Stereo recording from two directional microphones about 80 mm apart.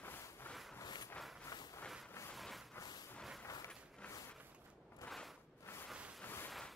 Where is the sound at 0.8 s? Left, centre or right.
Left.